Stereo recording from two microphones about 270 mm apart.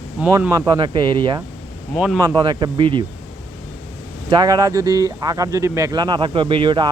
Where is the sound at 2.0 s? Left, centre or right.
Centre.